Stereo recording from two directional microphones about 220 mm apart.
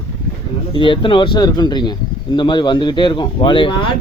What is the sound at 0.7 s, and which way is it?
Speech, 20° left (ahead or behind).